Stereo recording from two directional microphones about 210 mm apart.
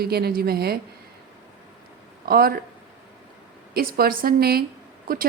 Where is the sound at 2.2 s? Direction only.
45° right (ahead or behind).